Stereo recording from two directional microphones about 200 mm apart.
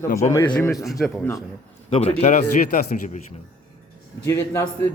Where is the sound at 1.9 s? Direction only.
30° left (ahead or behind).